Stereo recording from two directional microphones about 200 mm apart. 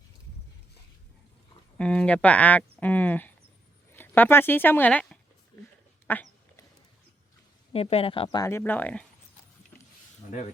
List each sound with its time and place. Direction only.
1.8 s speech: 5° left (ahead or behind)
7.7 s speech: 30° left (ahead or behind); by 9.0 s 10° left (ahead or behind)